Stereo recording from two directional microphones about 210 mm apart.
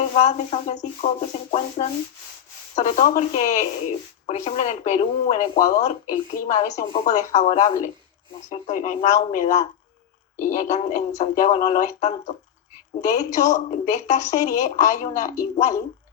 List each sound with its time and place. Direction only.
0.2 s speech: 30° left (ahead or behind)